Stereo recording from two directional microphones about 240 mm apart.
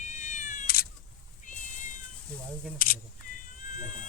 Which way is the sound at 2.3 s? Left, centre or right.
Centre.